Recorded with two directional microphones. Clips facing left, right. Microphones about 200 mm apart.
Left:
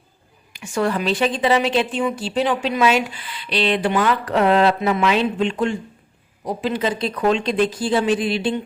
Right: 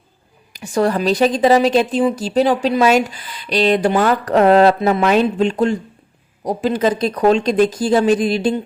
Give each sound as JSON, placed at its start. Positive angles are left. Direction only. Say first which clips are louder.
{"t": 0.5, "sound": "a woman's voice", "louder": "right 4 dB", "side_deg": -35}